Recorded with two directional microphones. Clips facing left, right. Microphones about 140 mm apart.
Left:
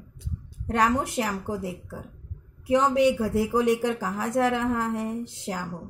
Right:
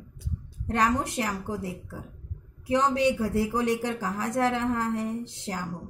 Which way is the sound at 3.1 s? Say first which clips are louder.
Left 3 dB; 15° left (ahead or behind).